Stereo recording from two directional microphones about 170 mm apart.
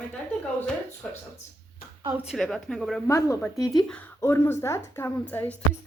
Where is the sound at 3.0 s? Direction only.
15° left (ahead or behind).